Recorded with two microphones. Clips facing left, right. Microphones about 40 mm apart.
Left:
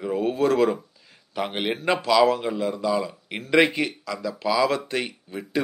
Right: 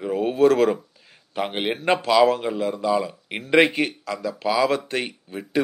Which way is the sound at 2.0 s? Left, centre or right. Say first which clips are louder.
Right 1 dB; right.